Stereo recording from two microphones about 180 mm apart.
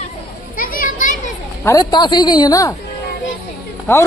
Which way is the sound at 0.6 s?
50° left (ahead or behind).